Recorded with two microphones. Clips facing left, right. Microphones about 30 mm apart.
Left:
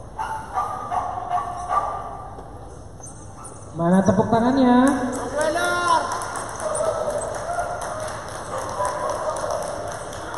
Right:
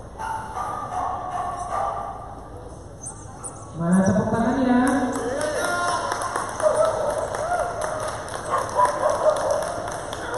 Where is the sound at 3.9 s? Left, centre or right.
Centre.